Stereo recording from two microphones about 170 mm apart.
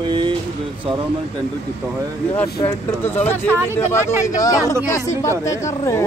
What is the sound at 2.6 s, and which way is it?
Speech, 20° left (ahead or behind).